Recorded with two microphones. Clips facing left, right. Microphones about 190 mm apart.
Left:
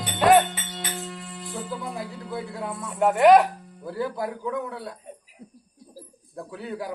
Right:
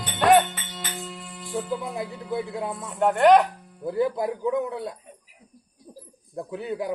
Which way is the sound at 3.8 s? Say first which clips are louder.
Right 4 dB; 20° right (ahead or behind).